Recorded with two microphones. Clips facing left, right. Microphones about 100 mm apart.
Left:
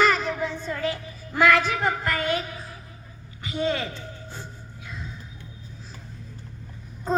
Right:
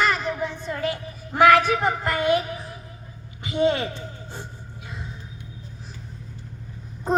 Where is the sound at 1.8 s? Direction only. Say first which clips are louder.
Right 2 dB; 20° right (ahead or behind).